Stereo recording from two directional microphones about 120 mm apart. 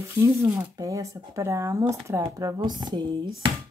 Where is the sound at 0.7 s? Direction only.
25° right (ahead or behind).